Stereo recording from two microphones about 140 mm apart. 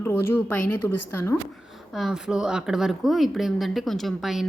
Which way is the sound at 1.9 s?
Centre (ahead or behind).